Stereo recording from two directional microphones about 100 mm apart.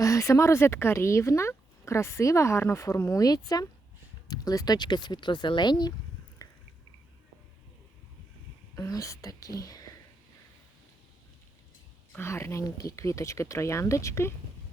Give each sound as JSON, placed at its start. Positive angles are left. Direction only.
{"t": 0.0, "sound": "speech", "side_deg": 30}
{"t": 6.4, "sound": "drip", "side_deg": 35}
{"t": 8.7, "sound": "speech", "side_deg": 35}
{"t": 12.1, "sound": "speech", "side_deg": 25}